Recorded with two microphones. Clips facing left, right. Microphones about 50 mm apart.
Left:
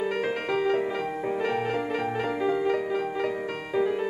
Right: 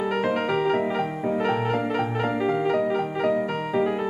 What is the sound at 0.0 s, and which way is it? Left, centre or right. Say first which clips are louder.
Music: right 4 dB; centre.